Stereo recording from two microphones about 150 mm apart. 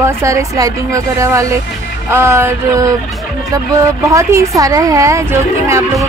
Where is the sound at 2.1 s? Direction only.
15° right (ahead or behind).